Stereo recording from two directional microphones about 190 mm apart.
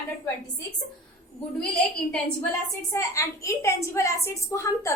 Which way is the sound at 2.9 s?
15° left (ahead or behind).